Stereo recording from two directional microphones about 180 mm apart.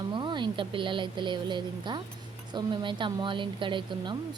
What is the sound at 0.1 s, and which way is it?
A woman's voice, 25° right (ahead or behind).